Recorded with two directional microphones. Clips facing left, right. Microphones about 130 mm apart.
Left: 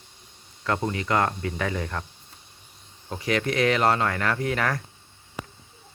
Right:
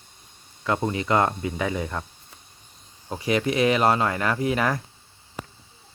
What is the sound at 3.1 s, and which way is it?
Speech, 15° right (ahead or behind).